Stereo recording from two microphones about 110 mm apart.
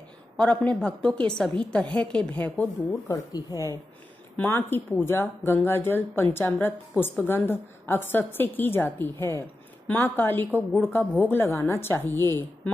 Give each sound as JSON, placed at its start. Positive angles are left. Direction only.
{"t": 0.4, "sound": "a woman's voice", "side_deg": 10}
{"t": 2.8, "sound": "speech", "side_deg": 35}
{"t": 4.4, "sound": "a woman's voice", "side_deg": 20}